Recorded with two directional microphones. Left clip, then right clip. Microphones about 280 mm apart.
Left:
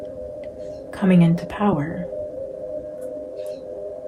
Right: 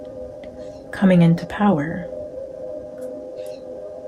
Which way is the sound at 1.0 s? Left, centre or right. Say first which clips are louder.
Right 3 dB; right.